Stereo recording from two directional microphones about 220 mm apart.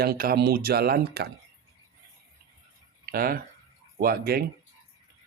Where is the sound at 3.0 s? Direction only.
40° right (ahead or behind).